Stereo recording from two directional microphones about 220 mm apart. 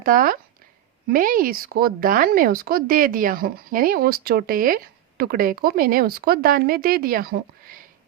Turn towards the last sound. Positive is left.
turn(degrees=-40)  # may be behind; listen again after turning